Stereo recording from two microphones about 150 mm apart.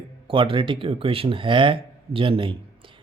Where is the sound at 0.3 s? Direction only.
35° right (ahead or behind).